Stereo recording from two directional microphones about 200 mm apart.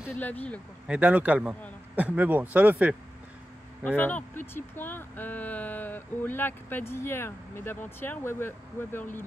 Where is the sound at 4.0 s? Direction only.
10° left (ahead or behind).